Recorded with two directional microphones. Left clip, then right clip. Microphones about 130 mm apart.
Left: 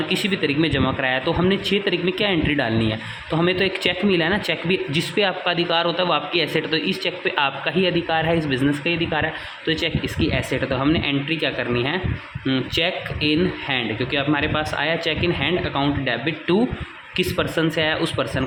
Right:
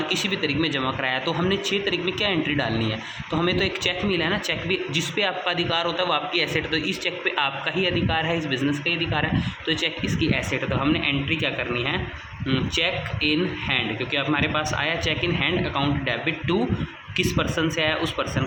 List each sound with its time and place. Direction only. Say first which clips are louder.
0.1 s a man's voice: left 4 dB; 50° left (ahead or behind)